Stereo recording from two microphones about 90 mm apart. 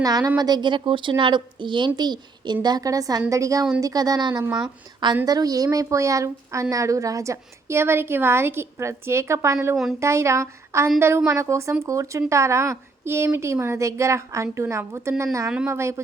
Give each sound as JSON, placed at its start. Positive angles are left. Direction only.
{"t": 0.0, "sound": "a woman's voice", "side_deg": -45}